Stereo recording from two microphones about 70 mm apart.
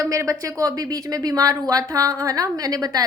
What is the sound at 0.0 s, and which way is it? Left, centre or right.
Speech, right.